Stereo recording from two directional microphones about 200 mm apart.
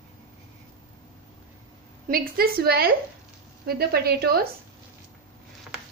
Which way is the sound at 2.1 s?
50° right (ahead or behind).